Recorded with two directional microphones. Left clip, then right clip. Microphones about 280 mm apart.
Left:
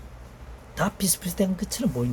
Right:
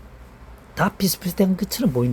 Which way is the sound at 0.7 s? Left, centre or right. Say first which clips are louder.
Right 5 dB; right.